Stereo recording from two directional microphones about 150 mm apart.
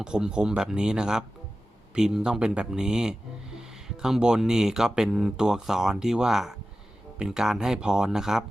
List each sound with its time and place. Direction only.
0.0 s speech: 5° right (ahead or behind)